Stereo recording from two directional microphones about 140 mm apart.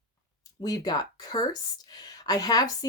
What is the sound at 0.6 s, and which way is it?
Speech, 30° left (ahead or behind).